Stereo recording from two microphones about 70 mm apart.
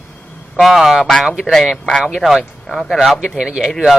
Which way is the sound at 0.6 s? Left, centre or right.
Centre.